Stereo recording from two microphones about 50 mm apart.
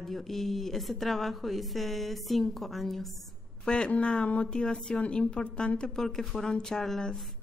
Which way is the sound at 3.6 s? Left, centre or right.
Centre.